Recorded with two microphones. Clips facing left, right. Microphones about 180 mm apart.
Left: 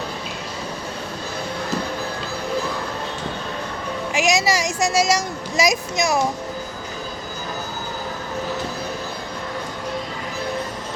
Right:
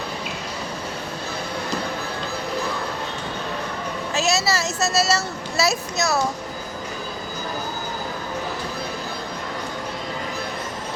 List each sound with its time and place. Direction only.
4.1 s speech: 15° left (ahead or behind)